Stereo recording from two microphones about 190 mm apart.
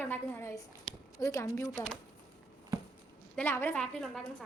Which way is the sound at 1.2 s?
15° left (ahead or behind).